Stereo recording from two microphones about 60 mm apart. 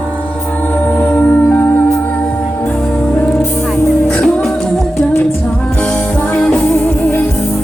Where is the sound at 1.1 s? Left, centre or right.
Left.